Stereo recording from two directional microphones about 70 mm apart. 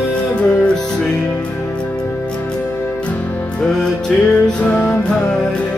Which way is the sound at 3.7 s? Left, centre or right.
Centre.